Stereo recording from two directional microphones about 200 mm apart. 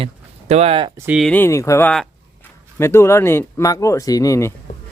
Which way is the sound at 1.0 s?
5° right (ahead or behind).